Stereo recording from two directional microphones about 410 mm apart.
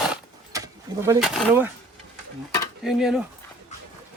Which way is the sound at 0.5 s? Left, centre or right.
Centre.